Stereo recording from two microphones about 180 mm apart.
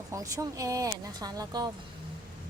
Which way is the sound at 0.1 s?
20° right (ahead or behind).